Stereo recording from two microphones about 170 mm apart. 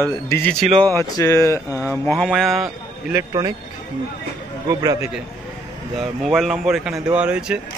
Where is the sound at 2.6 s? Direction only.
20° right (ahead or behind).